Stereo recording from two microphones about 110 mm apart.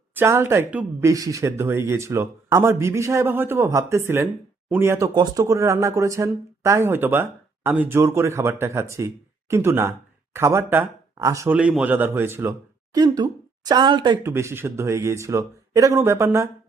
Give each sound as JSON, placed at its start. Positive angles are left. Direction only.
{"t": 0.1, "sound": "speech", "side_deg": -20}
{"t": 1.0, "sound": "speech", "side_deg": -30}
{"t": 5.1, "sound": "speech", "side_deg": -40}
{"t": 5.4, "sound": "speech", "side_deg": -25}
{"t": 11.2, "sound": "speech", "side_deg": -30}
{"t": 11.4, "sound": "speech", "side_deg": -10}
{"t": 12.9, "sound": "speech", "side_deg": -35}
{"t": 14.3, "sound": "speech", "side_deg": -25}